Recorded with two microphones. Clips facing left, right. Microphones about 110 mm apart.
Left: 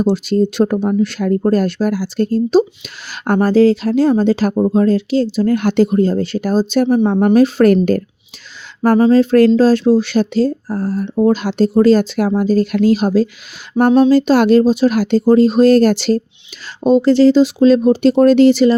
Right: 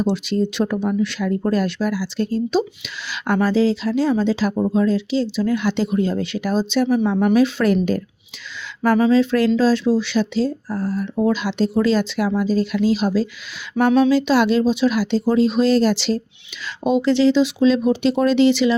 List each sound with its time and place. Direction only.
0.0 s speech: 40° left (ahead or behind)
8.8 s speech: 40° left (ahead or behind)